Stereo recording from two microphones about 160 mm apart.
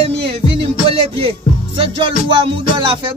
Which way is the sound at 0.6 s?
35° right (ahead or behind).